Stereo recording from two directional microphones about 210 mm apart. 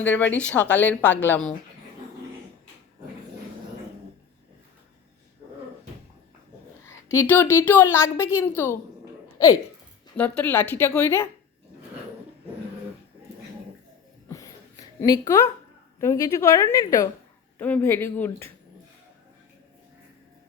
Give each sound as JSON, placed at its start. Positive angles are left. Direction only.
{"t": 0.0, "sound": "a woman's voice", "side_deg": 10}
{"t": 6.8, "sound": "a woman's voice", "side_deg": 15}
{"t": 14.3, "sound": "a sound", "side_deg": 15}
{"t": 16.0, "sound": "a woman's voice", "side_deg": 15}